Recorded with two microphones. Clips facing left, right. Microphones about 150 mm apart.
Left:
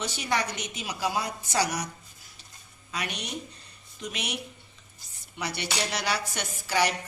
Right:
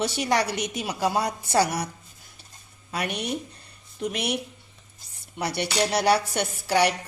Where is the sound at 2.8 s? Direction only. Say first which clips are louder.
Right 6 dB; 55° right (ahead or behind).